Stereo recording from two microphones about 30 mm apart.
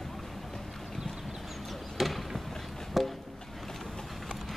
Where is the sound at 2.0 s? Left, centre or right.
Centre.